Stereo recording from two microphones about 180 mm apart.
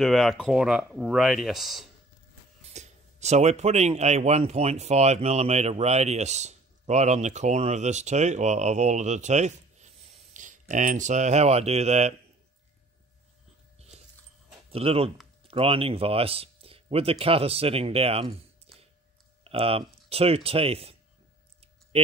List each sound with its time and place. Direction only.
0.0 s speech: centre (ahead or behind)
2.6 s speech: 40° right (ahead or behind)
13.7 s dog: 35° right (ahead or behind)
14.7 s speech: 35° right (ahead or behind)
19.4 s speech: 30° right (ahead or behind)